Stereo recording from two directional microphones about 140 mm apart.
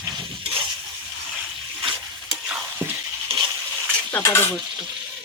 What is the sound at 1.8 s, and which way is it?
Stir, 35° right (ahead or behind).